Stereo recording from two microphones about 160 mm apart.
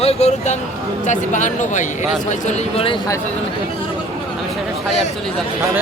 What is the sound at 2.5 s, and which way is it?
Speech, 35° left (ahead or behind).